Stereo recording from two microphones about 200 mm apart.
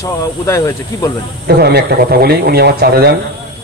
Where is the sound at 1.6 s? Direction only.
50° right (ahead or behind).